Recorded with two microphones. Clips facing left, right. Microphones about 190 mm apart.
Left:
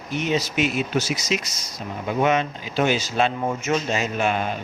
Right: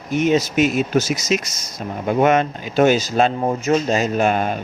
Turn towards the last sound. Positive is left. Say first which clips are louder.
# right 5 dB
turn(degrees=-45)  # may be behind; listen again after turning